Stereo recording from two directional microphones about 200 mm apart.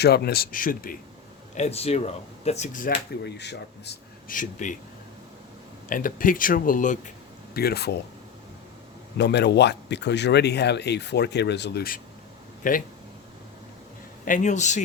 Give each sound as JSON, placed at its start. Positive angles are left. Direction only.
{"t": 0.0, "sound": "speech", "side_deg": 50}
{"t": 1.5, "sound": "speech", "side_deg": 35}
{"t": 3.2, "sound": "a man's voice", "side_deg": 55}
{"t": 4.4, "sound": "speech", "side_deg": 40}
{"t": 5.9, "sound": "speech", "side_deg": 45}
{"t": 7.5, "sound": "speech", "side_deg": 50}
{"t": 9.1, "sound": "speech", "side_deg": 55}
{"t": 12.6, "sound": "speech", "side_deg": 40}
{"t": 14.3, "sound": "speech", "side_deg": 40}